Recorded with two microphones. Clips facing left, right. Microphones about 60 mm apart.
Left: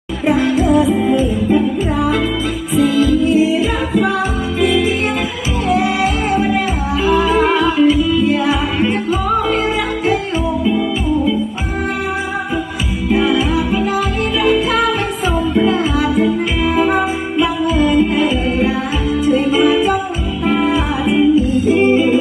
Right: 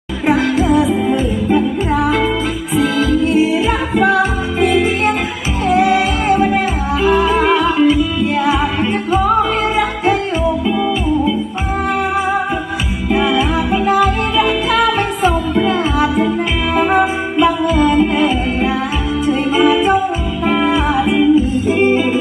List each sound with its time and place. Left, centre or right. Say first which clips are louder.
0.3 s music: even; right
2.7 s music: left 2 dB; right
5.6 s music: right 3 dB; right
13.1 s music: even; right
21.4 s music: left 1 dB; right